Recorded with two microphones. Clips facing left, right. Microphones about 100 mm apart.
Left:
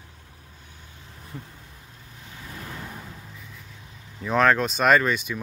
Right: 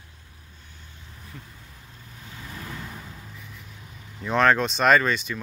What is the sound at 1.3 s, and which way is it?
Speech, 25° left (ahead or behind).